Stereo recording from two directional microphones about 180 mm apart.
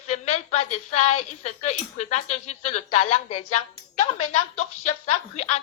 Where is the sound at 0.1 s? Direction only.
40° left (ahead or behind).